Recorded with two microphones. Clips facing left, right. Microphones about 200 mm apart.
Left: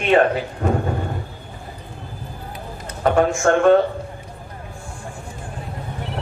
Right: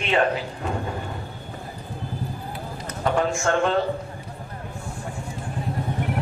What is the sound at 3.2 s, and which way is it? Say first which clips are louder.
Speech: left 5 dB; 55° left (ahead or behind).